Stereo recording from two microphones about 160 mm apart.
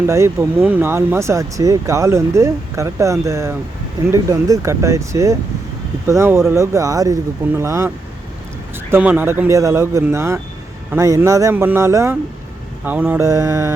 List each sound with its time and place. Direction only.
0.1 s speech: 15° right (ahead or behind)